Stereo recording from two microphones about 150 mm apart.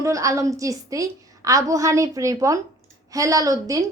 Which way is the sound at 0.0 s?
20° right (ahead or behind).